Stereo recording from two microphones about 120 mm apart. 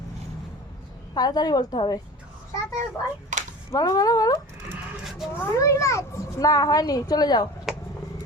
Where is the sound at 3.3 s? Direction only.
90° right.